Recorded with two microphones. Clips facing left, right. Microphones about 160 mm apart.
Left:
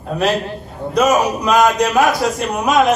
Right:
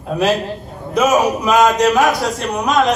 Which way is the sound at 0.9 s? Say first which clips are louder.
Even; 5° right (ahead or behind).